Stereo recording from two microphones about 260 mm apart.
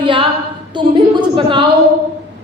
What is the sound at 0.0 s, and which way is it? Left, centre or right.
Speech, centre.